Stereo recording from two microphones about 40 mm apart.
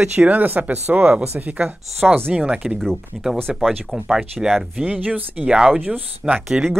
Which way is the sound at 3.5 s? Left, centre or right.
Centre.